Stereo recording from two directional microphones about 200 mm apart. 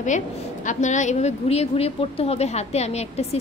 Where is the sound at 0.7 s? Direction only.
35° left (ahead or behind).